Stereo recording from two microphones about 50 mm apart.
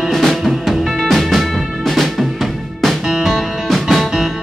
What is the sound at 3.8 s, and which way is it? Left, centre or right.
Music, centre.